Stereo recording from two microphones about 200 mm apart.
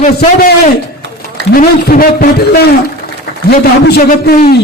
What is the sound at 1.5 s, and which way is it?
A man's voice, 45° left (ahead or behind).